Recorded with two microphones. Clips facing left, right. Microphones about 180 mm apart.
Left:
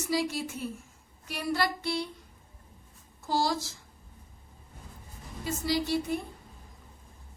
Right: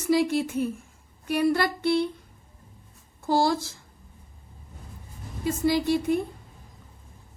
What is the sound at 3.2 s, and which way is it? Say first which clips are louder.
Speech: right 6 dB; 55° right (ahead or behind).